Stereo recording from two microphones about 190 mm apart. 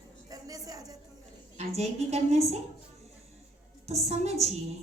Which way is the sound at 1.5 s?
35° right (ahead or behind).